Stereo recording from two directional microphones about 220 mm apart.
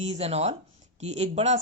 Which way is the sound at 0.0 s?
25° right (ahead or behind).